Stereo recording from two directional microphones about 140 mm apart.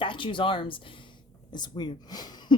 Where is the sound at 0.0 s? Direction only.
35° left (ahead or behind).